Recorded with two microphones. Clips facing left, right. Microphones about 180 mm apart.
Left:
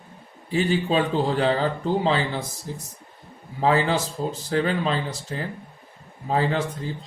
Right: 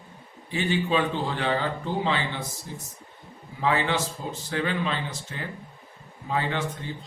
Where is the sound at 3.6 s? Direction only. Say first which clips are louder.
Left 4 dB; 35° left (ahead or behind).